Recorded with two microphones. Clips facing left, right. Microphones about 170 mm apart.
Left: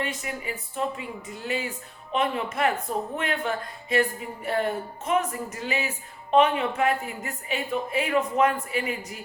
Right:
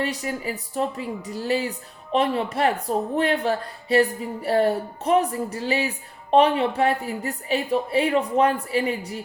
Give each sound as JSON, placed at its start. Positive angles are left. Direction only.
{"t": 0.0, "sound": "a woman's voice", "side_deg": -35}